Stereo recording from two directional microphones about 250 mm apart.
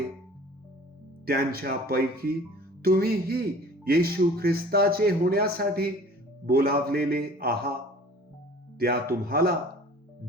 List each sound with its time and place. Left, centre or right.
1.2 s speech: right
8.8 s speech: right